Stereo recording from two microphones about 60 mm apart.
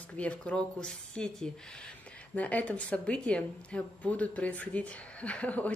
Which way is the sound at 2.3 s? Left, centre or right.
Left.